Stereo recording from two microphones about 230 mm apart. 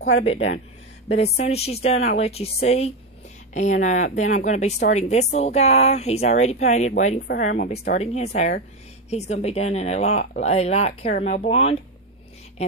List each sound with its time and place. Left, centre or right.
0.2 s speech: left